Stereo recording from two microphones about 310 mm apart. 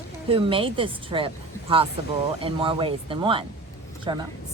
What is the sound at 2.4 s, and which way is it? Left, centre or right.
A woman's voice, centre.